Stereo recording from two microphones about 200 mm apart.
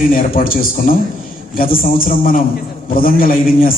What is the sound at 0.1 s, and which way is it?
A man's voice, 45° left (ahead or behind).